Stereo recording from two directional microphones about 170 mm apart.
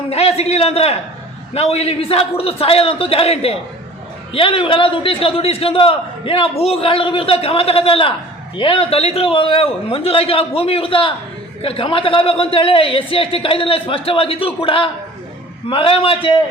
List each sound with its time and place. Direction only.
0.1 s a man's voice: 35° left (ahead or behind)